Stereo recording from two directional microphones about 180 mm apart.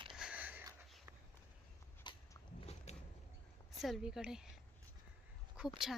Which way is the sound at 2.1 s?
25° left (ahead or behind).